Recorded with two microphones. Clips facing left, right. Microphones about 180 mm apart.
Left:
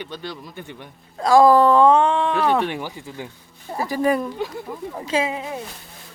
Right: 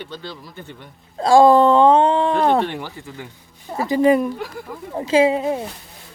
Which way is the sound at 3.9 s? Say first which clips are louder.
Right 6 dB; 20° right (ahead or behind).